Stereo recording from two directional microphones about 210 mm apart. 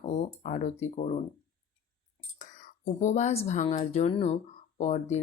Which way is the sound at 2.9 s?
35° left (ahead or behind).